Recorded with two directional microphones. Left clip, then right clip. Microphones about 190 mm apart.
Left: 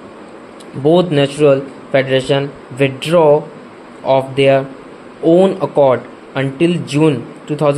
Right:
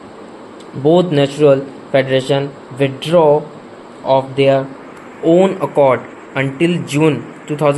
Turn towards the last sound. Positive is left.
turn(degrees=15)  # may be behind; listen again after turning